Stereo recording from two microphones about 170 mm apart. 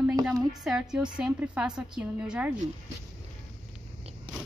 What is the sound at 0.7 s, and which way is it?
A woman's voice, 5° right (ahead or behind).